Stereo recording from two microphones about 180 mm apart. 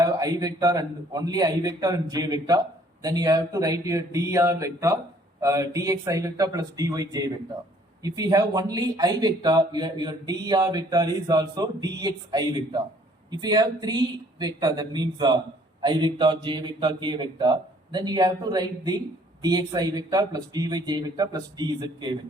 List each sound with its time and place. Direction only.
0.0 s a man's voice: 20° right (ahead or behind)